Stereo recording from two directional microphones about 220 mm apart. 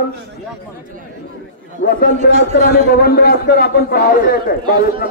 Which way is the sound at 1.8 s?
45° left (ahead or behind).